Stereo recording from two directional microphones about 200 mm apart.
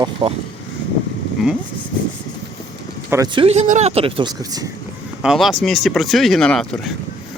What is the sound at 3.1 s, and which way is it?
Speech, 20° right (ahead or behind).